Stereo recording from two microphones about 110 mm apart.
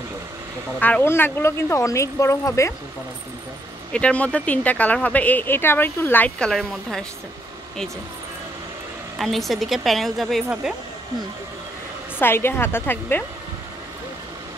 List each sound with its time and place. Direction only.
0.7 s speech: 15° left (ahead or behind)
3.9 s speech: 10° left (ahead or behind)
9.2 s a woman's voice: centre (ahead or behind)
12.2 s speech: 20° left (ahead or behind)